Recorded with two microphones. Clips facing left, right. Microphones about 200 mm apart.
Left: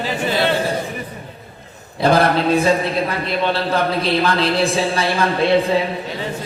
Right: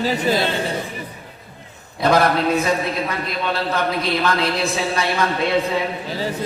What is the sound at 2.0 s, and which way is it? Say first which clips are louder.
A man's voice: left 2 dB; 30° left (ahead or behind).